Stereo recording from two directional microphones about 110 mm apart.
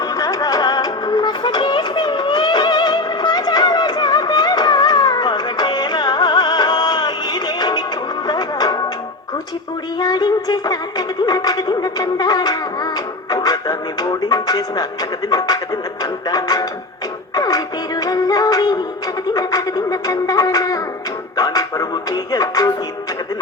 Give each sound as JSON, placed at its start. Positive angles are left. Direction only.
{"t": 0.0, "sound": "music", "side_deg": 30}
{"t": 10.0, "sound": "music", "side_deg": 35}
{"t": 15.3, "sound": "speech", "side_deg": 35}
{"t": 17.3, "sound": "music", "side_deg": 35}